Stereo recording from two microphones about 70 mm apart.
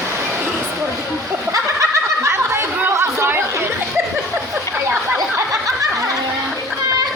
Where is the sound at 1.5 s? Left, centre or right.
Right.